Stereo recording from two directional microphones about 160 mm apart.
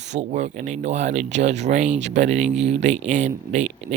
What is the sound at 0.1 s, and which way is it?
Speech, 45° right (ahead or behind).